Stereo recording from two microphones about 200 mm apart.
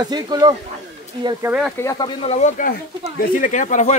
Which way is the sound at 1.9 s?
20° left (ahead or behind).